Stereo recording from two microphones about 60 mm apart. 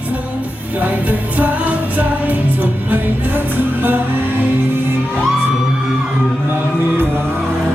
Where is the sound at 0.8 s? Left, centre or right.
Right.